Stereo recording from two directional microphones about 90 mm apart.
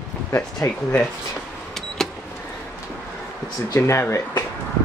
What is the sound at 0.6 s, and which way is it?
Speech, 35° left (ahead or behind).